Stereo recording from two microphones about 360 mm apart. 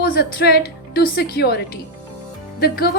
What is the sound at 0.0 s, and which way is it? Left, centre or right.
A woman's voice, left.